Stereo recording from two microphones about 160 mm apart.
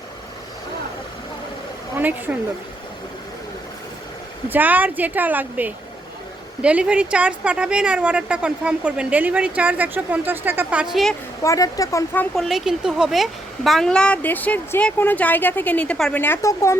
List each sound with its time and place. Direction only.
2.0 s a woman's voice: 10° right (ahead or behind)
4.4 s a woman's voice: 10° right (ahead or behind)
11.4 s speech: 20° left (ahead or behind)
12.3 s speech: centre (ahead or behind); by 16.7 s 20° left (ahead or behind)